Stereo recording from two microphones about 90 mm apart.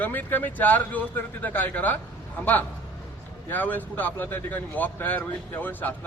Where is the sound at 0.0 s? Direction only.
20° left (ahead or behind).